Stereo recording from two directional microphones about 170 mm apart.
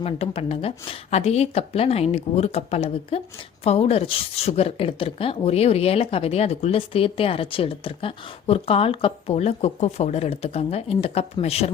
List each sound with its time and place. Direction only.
0.0 s a woman's voice: 35° left (ahead or behind)